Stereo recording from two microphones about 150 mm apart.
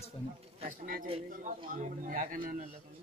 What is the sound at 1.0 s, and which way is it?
Speech, 40° right (ahead or behind).